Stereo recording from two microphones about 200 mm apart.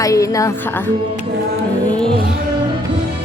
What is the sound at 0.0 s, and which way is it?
Speech, 15° left (ahead or behind).